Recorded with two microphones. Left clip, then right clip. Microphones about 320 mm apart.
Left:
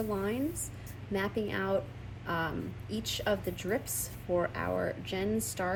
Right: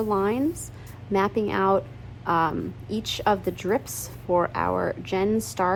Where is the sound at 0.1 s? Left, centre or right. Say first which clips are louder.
Right 10 dB; centre.